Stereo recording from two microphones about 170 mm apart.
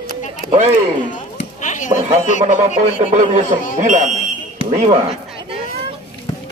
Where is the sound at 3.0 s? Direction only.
45° right (ahead or behind).